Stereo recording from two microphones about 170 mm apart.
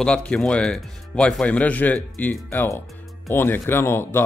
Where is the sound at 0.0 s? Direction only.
5° left (ahead or behind).